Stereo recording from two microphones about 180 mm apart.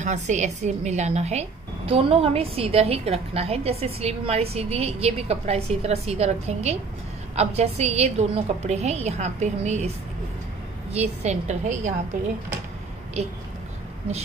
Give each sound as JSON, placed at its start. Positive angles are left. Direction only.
{"t": 0.0, "sound": "speech", "side_deg": -40}